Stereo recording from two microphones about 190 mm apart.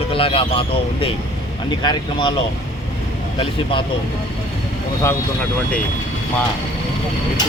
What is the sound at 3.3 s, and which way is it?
Speech, 25° left (ahead or behind).